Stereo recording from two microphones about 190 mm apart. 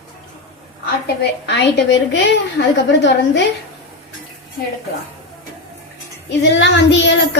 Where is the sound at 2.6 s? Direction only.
55° left (ahead or behind).